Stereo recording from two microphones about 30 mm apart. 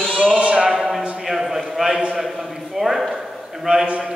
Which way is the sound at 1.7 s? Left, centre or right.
Centre.